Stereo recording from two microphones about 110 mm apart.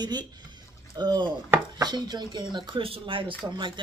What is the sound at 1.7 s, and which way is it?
Speech, 40° right (ahead or behind).